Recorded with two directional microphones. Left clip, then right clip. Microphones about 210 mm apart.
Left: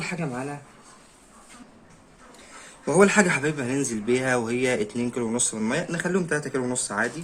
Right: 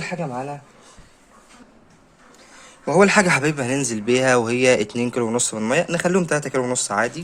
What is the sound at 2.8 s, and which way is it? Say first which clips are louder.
Speech: right 3 dB; 20° right (ahead or behind).